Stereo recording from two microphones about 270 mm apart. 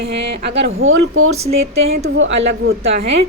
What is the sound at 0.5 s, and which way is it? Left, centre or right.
A woman's voice, right.